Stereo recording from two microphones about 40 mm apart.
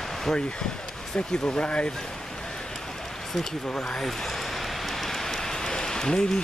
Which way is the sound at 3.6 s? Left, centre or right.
Left.